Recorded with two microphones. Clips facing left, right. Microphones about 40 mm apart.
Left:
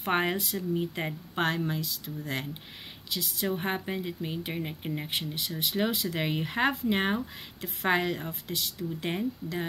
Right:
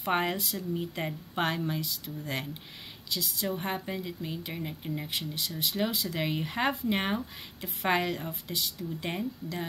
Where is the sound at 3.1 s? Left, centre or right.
Centre.